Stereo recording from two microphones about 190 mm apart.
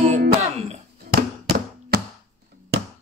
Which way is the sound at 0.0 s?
40° right (ahead or behind).